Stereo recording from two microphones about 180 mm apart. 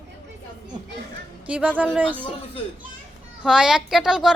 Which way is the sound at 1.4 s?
5° right (ahead or behind).